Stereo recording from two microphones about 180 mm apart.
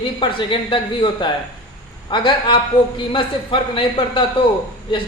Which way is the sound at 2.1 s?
25° left (ahead or behind).